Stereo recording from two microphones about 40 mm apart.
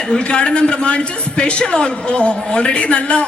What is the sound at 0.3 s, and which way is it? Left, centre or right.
A man's voice, left.